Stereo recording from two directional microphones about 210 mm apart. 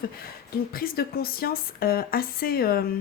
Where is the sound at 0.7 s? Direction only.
45° left (ahead or behind).